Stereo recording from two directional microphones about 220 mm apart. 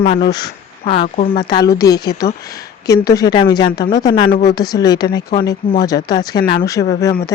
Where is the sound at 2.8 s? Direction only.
15° left (ahead or behind).